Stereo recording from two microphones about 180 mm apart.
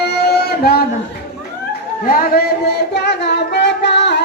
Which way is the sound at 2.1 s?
55° left (ahead or behind).